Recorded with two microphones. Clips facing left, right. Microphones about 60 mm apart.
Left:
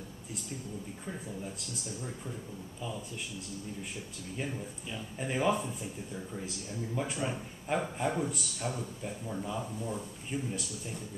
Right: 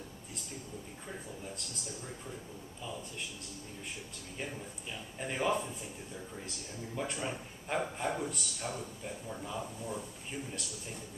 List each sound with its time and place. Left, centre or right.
4.9 s a man's voice: centre
7.0 s a man's voice: centre
10.3 s speech: centre